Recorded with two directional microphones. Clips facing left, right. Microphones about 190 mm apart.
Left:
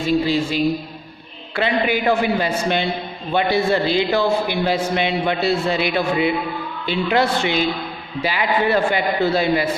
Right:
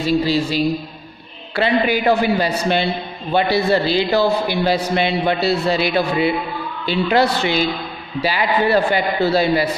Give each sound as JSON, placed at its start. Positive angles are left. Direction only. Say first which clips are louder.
{"t": 1.5, "sound": "a man's voice", "louder": "right 2 dB", "side_deg": -35}